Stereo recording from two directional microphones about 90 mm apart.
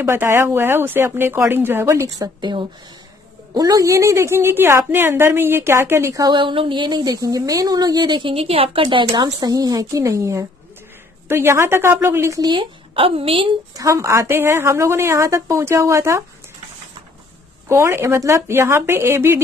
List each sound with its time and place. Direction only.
0.0 s a woman's voice: 30° right (ahead or behind)
3.5 s a woman's voice: 40° right (ahead or behind)
6.2 s speech: 65° right (ahead or behind); by 9.0 s 90° right
9.1 s a woman's voice: 45° right (ahead or behind); by 12.4 s 30° right (ahead or behind)
12.4 s speech: 50° right (ahead or behind)
12.9 s a woman's voice: 90° right
13.7 s a woman's voice: 35° right (ahead or behind)
17.6 s a woman's voice: 30° right (ahead or behind)